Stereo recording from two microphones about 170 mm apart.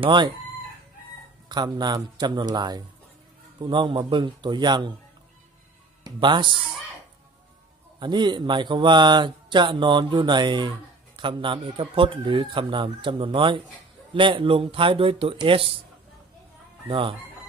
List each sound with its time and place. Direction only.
0.0 s speech: 25° right (ahead or behind)
1.5 s speech: 25° right (ahead or behind)
6.0 s speech: 25° right (ahead or behind)
8.0 s speech: 25° right (ahead or behind)
16.8 s speech: 30° right (ahead or behind)